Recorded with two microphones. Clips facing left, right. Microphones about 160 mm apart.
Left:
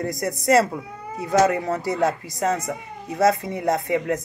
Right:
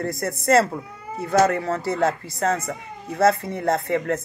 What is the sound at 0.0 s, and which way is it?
Speech, 15° left (ahead or behind).